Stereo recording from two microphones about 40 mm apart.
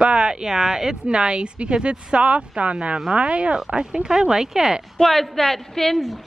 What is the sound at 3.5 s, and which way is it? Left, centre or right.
Speech, centre.